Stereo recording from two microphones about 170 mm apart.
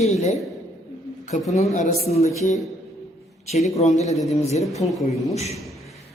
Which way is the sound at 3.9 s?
40° left (ahead or behind).